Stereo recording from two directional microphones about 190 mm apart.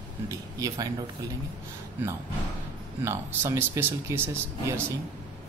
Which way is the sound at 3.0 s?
15° right (ahead or behind).